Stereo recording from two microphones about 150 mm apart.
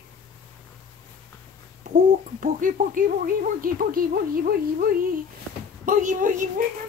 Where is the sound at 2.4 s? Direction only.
60° right (ahead or behind); by 4.9 s 85° right.